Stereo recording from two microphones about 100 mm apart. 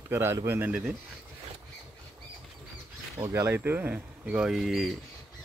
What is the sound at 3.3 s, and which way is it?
Speech, 20° right (ahead or behind).